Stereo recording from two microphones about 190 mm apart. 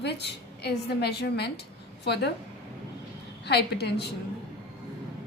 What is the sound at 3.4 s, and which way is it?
Speech, 60° left (ahead or behind).